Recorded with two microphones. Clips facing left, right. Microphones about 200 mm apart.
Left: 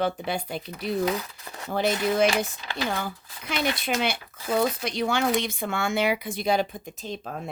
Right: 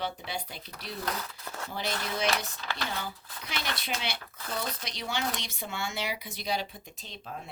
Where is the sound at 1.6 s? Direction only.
55° left (ahead or behind).